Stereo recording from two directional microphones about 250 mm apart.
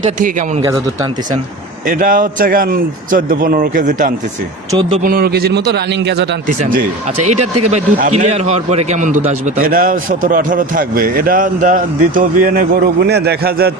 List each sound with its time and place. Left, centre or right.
1.9 s a man's voice: right
4.7 s speech: centre
5.0 s a man's voice: right
7.7 s a man's voice: right